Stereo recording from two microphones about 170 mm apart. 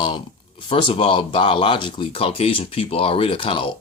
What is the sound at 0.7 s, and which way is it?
Speech, 35° left (ahead or behind).